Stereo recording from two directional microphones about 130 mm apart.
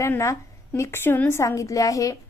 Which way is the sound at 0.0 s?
20° left (ahead or behind).